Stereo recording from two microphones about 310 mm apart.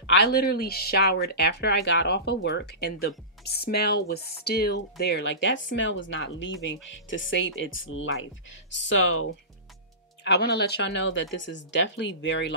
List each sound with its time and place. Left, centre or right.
0.0 s speech: left